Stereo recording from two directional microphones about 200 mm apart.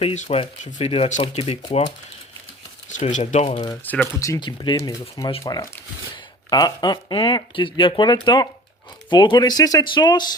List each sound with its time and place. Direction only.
0.0 s speech: 35° left (ahead or behind)
2.9 s speech: 40° left (ahead or behind)
3.8 s speech: 10° left (ahead or behind)